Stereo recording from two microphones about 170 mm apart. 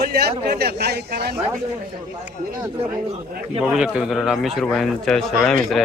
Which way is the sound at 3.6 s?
5° right (ahead or behind).